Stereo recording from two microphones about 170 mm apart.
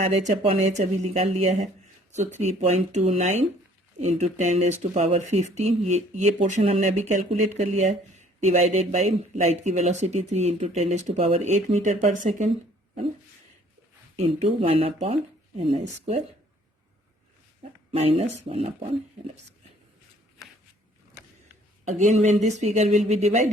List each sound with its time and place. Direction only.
0.0 s speech: 40° right (ahead or behind)
14.2 s speech: 35° right (ahead or behind)
17.9 s speech: 35° right (ahead or behind)
21.8 s speech: 45° right (ahead or behind)